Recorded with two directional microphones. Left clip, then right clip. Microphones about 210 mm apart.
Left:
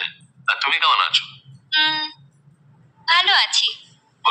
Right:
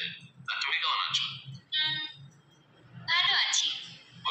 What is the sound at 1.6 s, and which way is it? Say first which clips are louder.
Music: left 11 dB; 45° left (ahead or behind).